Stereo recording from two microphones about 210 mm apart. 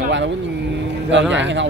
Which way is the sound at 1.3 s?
60° right (ahead or behind).